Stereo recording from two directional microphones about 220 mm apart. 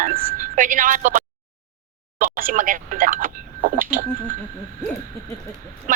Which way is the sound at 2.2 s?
40° right (ahead or behind).